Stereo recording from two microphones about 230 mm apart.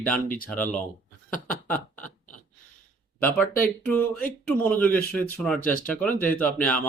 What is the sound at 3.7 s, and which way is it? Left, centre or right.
Speech, centre.